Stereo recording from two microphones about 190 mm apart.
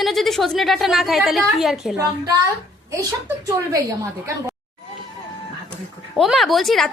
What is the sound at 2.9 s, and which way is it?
Speech, 15° right (ahead or behind).